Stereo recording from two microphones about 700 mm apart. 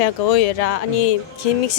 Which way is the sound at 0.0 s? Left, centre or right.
Left.